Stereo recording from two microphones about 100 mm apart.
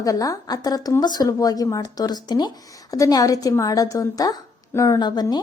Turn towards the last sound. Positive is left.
turn(degrees=45)  # may be behind; listen again after turning